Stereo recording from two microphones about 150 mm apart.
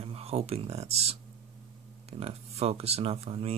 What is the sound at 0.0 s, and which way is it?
Speech, 40° right (ahead or behind).